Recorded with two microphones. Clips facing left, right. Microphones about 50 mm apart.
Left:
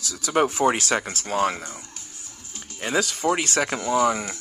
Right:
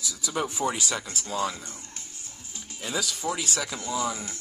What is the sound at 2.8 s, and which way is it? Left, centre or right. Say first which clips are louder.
Speech: left 7 dB; left.